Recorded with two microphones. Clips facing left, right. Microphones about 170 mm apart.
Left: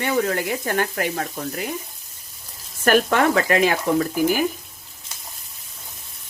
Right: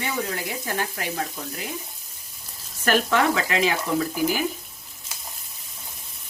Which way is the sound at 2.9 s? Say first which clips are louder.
Left 3 dB; 50° left (ahead or behind).